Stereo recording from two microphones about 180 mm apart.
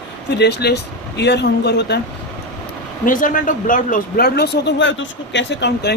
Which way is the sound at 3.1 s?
50° left (ahead or behind).